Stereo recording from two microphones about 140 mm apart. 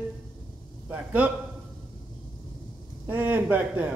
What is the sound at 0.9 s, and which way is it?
Speech, 10° right (ahead or behind).